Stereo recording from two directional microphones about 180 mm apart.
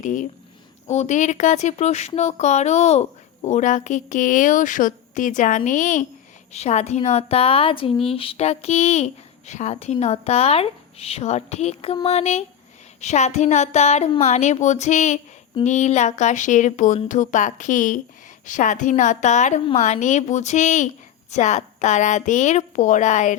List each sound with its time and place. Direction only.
0.0 s a woman's voice: 45° left (ahead or behind)